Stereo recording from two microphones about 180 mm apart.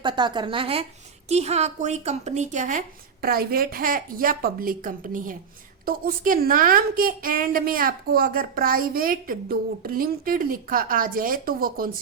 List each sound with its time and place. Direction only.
0.0 s a woman's voice: 25° right (ahead or behind); by 11.9 s 55° right (ahead or behind)